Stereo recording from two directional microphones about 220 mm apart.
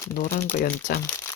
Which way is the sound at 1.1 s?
10° left (ahead or behind).